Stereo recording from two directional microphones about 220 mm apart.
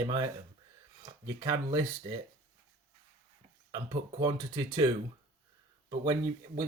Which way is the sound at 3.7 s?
20° right (ahead or behind).